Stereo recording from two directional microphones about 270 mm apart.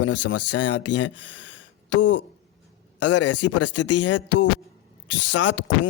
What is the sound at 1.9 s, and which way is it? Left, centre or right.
Speech, left.